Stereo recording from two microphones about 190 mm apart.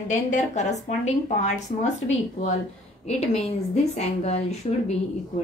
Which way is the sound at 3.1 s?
35° left (ahead or behind).